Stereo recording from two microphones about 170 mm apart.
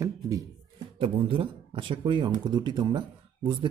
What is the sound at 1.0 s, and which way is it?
A man's voice, 30° right (ahead or behind).